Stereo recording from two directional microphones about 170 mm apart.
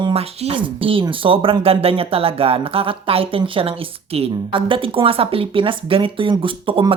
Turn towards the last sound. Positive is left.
turn(degrees=-30)  # may be behind; listen again after turning